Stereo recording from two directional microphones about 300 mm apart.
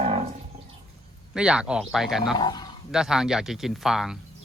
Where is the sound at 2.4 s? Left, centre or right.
Centre.